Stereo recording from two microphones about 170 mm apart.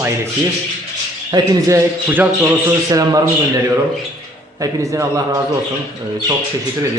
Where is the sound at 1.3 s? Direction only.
20° right (ahead or behind).